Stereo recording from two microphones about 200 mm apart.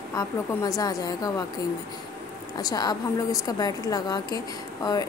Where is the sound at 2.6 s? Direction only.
20° left (ahead or behind).